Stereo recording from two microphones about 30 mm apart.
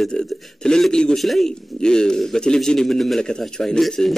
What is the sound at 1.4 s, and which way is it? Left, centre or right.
Speech, left.